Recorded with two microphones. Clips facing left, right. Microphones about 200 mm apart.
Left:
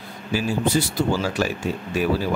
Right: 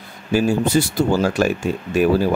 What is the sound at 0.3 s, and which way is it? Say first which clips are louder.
Speech: right 5 dB; 50° right (ahead or behind).